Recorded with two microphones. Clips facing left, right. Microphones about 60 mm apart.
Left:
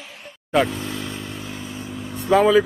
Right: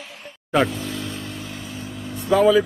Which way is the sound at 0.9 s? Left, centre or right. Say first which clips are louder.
Even; left.